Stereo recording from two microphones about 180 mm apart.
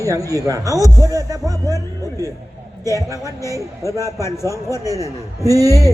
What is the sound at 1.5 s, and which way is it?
Speech, 15° left (ahead or behind).